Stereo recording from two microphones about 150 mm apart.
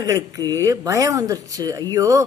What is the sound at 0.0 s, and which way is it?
A woman's voice, 25° right (ahead or behind).